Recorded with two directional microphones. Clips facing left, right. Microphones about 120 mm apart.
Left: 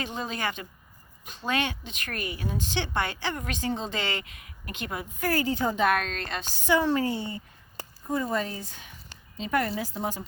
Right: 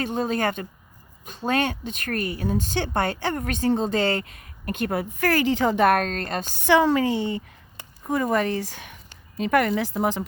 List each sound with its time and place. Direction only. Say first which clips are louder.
0.0 s speech: right 8 dB; 50° right (ahead or behind); by 5.8 s 85° right
5.8 s speech: right 5 dB; 45° right (ahead or behind)
6.7 s a woman's voice: right 5 dB; 90° right
8.0 s speech: right 6 dB; 75° right (ahead or behind)